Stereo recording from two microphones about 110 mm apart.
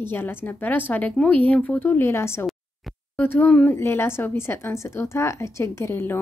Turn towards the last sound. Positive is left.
turn(degrees=20)  # may be behind; listen again after turning